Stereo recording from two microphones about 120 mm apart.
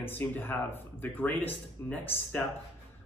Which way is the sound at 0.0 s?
15° left (ahead or behind).